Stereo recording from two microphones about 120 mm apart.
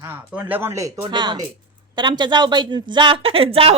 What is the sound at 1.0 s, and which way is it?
Speech, 40° right (ahead or behind).